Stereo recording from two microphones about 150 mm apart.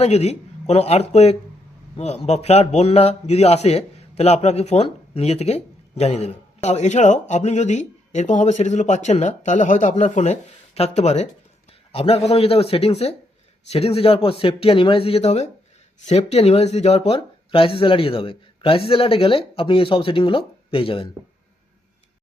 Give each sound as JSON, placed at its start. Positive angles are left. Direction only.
{"t": 0.0, "sound": "a man's voice", "side_deg": 45}